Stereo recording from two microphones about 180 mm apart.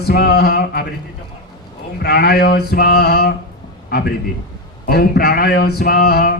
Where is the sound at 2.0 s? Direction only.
65° left (ahead or behind).